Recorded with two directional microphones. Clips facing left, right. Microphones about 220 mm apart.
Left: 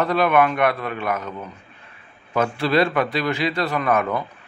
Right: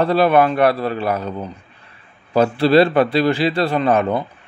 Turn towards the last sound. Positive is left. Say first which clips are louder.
# right 4 dB
turn(degrees=-30)  # may be behind; listen again after turning